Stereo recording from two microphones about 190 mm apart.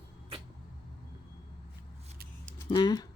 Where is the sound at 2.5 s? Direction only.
20° left (ahead or behind).